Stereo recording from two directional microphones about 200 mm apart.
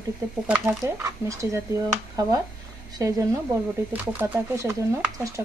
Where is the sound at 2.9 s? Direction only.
15° right (ahead or behind).